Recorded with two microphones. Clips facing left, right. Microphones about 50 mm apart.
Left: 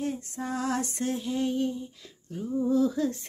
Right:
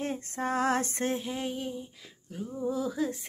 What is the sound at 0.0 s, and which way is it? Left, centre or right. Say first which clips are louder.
Female singing: even; right.